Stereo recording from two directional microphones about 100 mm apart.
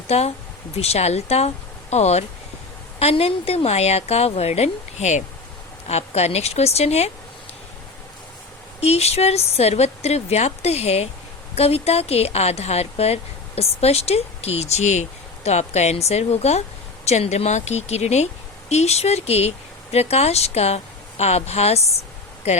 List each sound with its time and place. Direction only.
0.1 s speech: 90° left
8.8 s speech: 90° left